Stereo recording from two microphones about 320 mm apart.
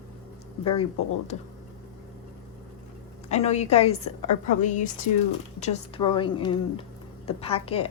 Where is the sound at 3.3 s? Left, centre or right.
Left.